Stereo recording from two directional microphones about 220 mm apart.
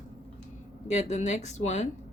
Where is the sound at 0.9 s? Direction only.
30° left (ahead or behind).